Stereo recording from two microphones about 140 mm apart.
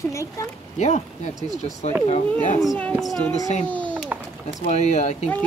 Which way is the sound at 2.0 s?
50° left (ahead or behind).